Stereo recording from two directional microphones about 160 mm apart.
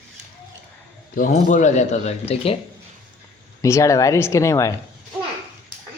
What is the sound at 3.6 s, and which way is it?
Speech, 20° left (ahead or behind).